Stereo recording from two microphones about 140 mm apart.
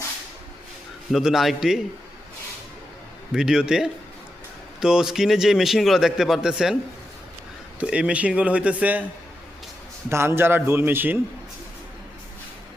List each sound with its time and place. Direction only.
1.1 s a man's voice: centre (ahead or behind)
3.3 s a man's voice: 5° right (ahead or behind)
7.8 s a man's voice: 10° right (ahead or behind)
10.1 s a man's voice: 15° right (ahead or behind)